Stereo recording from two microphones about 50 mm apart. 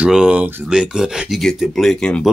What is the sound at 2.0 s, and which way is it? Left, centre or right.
Speech, centre.